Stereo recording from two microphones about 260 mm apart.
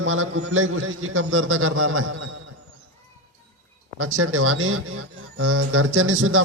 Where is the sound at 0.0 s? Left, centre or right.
Right.